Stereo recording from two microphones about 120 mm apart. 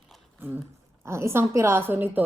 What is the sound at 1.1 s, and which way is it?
A woman's voice, 20° right (ahead or behind).